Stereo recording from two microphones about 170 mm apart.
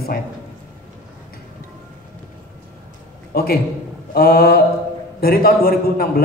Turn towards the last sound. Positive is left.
turn(degrees=60)  # may be behind; listen again after turning